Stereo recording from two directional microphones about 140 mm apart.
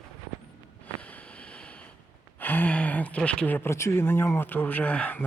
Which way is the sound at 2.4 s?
10° left (ahead or behind).